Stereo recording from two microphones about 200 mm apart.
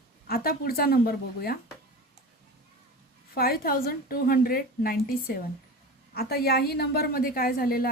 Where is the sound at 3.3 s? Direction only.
50° left (ahead or behind).